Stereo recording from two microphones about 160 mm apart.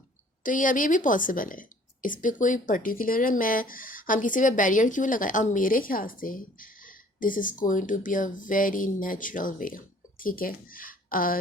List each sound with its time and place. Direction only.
0.4 s a woman's voice: 55° left (ahead or behind)